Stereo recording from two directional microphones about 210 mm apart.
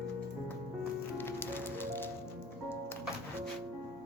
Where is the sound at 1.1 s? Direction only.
10° left (ahead or behind).